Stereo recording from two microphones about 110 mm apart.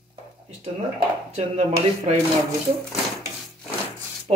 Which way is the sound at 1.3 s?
90° right.